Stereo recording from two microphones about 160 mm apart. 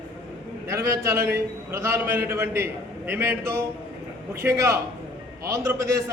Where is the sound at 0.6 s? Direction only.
15° right (ahead or behind).